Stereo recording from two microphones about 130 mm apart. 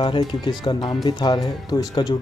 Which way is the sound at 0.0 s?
40° left (ahead or behind).